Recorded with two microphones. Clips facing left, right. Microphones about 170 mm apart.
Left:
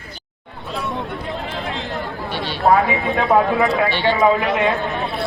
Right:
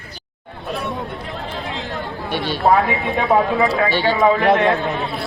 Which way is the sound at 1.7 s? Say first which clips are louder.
Left 1 dB; centre (ahead or behind).